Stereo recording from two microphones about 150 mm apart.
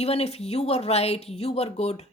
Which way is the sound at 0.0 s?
45° left (ahead or behind).